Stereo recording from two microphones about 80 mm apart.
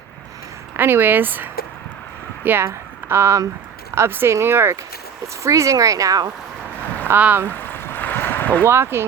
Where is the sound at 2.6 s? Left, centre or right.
Right.